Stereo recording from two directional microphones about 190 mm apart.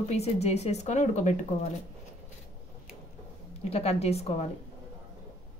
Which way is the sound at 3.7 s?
35° left (ahead or behind).